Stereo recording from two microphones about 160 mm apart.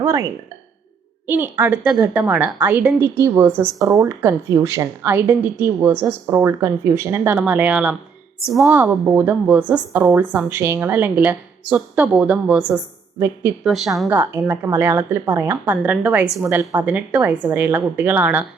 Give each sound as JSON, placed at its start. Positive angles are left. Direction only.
{"t": 0.0, "sound": "speech", "side_deg": -20}
{"t": 1.3, "sound": "a woman's voice", "side_deg": -15}
{"t": 8.7, "sound": "a woman's voice", "side_deg": -15}
{"t": 13.7, "sound": "a woman's voice", "side_deg": 0}
{"t": 14.1, "sound": "a woman's voice", "side_deg": -15}